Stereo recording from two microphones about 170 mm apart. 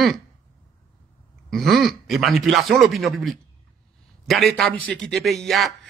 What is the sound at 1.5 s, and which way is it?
A man's voice, centre (ahead or behind).